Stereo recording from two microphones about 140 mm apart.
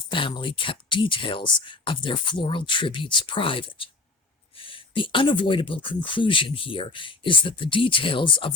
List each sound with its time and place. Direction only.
0.1 s speech: 35° left (ahead or behind)